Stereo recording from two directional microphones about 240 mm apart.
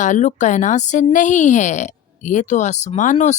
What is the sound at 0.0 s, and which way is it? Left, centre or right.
A woman's voice, left.